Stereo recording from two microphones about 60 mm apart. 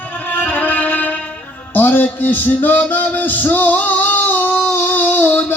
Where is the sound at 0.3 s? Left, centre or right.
Left.